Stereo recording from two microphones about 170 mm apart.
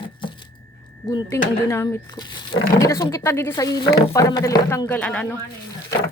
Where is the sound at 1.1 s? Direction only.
20° left (ahead or behind).